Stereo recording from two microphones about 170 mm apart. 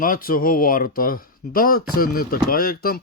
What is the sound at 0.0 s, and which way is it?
Speech, 55° left (ahead or behind).